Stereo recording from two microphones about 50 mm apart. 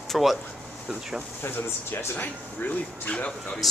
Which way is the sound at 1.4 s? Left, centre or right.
Left.